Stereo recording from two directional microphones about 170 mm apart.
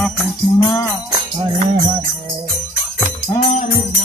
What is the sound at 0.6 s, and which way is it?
Music, 25° left (ahead or behind).